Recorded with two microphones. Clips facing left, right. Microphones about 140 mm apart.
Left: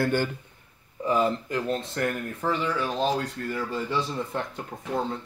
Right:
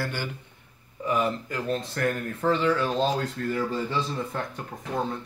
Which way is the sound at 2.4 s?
10° left (ahead or behind).